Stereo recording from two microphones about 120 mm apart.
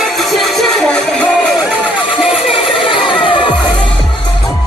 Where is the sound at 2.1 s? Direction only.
50° left (ahead or behind).